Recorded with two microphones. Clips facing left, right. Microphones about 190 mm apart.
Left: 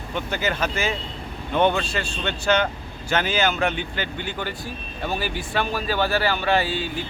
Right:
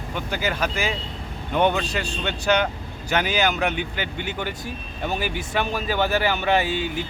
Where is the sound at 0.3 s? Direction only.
10° right (ahead or behind).